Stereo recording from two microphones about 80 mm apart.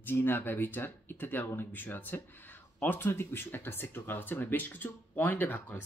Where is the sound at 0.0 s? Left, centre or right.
Left.